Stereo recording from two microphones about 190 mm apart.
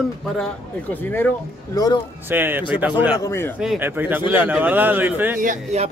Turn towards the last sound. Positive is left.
turn(degrees=-45)  # may be behind; listen again after turning